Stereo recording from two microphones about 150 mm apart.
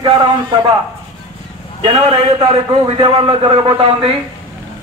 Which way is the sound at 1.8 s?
35° right (ahead or behind).